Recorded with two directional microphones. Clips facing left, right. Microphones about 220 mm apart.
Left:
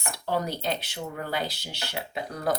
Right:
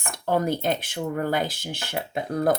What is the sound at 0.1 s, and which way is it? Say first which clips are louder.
Speech: right 6 dB; 50° right (ahead or behind).